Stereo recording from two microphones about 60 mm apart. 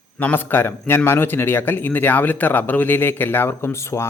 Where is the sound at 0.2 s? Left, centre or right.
Left.